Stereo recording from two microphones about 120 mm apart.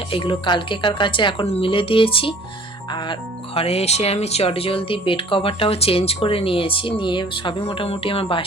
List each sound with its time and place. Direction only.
0.1 s speech: 45° left (ahead or behind)